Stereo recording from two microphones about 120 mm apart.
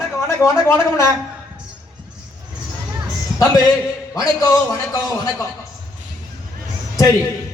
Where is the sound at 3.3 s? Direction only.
30° left (ahead or behind).